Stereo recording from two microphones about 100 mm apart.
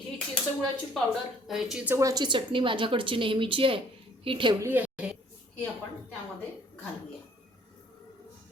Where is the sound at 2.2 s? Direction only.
55° right (ahead or behind).